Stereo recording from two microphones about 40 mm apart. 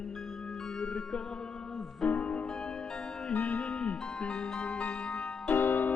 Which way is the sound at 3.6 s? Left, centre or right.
Centre.